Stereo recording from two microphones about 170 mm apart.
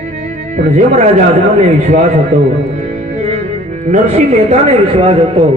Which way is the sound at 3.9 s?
40° right (ahead or behind).